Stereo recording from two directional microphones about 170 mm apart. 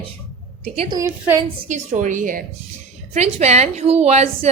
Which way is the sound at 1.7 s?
45° right (ahead or behind).